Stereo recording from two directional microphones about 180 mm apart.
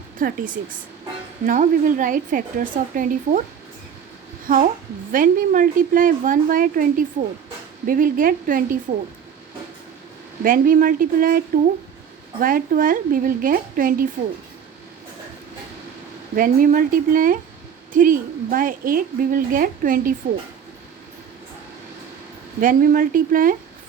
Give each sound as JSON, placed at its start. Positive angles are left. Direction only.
{"t": 0.2, "sound": "a woman's voice", "side_deg": -50}
{"t": 4.5, "sound": "a woman's voice", "side_deg": -50}
{"t": 10.4, "sound": "a woman's voice", "side_deg": -50}
{"t": 16.3, "sound": "a woman's voice", "side_deg": -50}
{"t": 22.6, "sound": "a woman's voice", "side_deg": -50}